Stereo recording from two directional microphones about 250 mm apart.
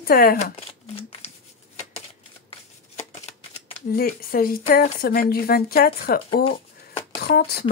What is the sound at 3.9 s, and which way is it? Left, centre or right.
Speech, left.